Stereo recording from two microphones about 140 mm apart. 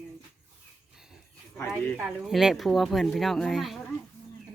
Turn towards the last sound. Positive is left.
turn(degrees=0)  # may be behind; listen again after turning